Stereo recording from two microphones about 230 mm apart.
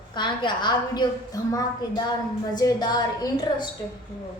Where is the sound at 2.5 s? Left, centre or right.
Centre.